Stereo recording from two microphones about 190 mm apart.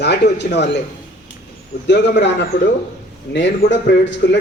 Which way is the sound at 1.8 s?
65° left (ahead or behind).